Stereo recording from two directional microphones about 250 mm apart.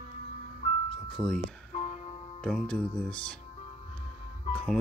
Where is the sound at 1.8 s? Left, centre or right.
Left.